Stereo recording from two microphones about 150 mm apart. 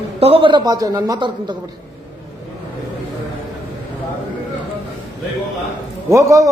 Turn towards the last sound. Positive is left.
turn(degrees=-20)  # may be behind; listen again after turning